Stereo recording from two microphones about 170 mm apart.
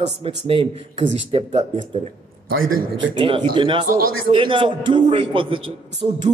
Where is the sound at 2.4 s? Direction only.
60° right (ahead or behind).